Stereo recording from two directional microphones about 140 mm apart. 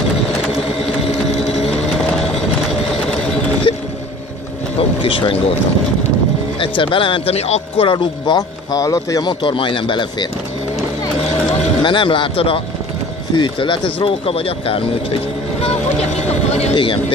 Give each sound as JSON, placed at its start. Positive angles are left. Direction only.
{"t": 1.0, "sound": "vehicle", "side_deg": 50}
{"t": 3.7, "sound": "a sound", "side_deg": 40}
{"t": 4.7, "sound": "vehicle", "side_deg": 40}
{"t": 6.6, "sound": "speech", "side_deg": 40}
{"t": 11.8, "sound": "speech", "side_deg": 35}
{"t": 16.7, "sound": "speech", "side_deg": 35}